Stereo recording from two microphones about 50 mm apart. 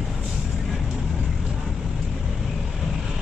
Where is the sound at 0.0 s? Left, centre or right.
Centre.